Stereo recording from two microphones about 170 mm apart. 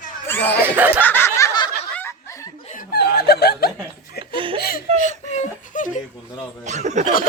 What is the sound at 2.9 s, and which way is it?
Snicker, 70° left (ahead or behind).